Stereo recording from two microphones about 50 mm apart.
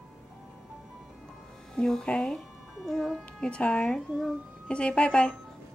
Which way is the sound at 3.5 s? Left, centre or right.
Left.